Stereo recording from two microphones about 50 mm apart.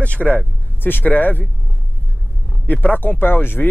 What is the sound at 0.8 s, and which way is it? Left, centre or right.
Speech, left.